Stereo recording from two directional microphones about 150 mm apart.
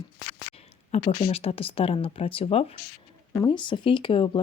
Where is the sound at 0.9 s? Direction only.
45° left (ahead or behind).